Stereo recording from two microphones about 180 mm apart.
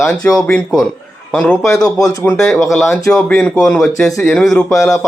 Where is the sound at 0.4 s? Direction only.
5° left (ahead or behind).